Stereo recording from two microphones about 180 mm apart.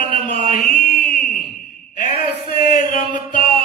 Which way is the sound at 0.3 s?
35° right (ahead or behind).